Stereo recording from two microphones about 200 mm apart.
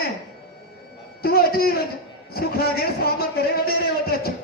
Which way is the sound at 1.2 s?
50° left (ahead or behind).